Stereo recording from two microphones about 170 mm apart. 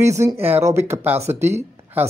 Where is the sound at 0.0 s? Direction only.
15° right (ahead or behind).